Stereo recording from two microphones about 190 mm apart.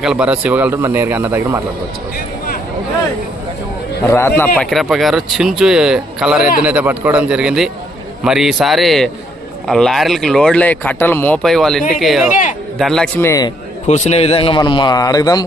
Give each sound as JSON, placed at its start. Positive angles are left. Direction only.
{"t": 0.0, "sound": "speech", "side_deg": -5}
{"t": 4.1, "sound": "speech", "side_deg": 10}
{"t": 12.3, "sound": "speech", "side_deg": 40}
{"t": 12.8, "sound": "a man's voice", "side_deg": 5}
{"t": 13.8, "sound": "a man's voice", "side_deg": 35}